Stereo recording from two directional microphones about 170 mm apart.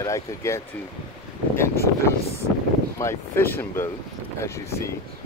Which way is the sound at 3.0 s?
15° left (ahead or behind).